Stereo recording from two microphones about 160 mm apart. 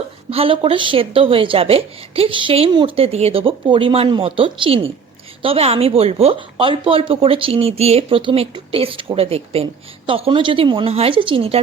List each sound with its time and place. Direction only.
0.3 s a woman's voice: 35° right (ahead or behind)